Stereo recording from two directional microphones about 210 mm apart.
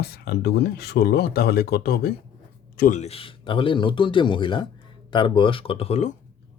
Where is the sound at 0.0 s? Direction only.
50° left (ahead or behind); by 6.1 s 30° left (ahead or behind).